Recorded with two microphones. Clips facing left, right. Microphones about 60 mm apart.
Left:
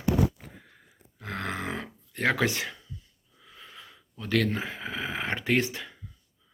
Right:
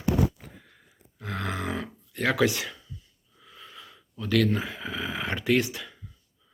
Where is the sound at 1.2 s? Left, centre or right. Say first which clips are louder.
Right 1 dB; left.